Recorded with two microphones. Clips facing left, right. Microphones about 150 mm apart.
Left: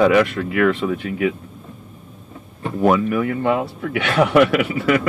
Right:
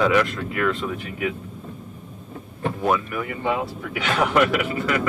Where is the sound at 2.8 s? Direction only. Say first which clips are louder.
Left 8 dB; 65° left (ahead or behind).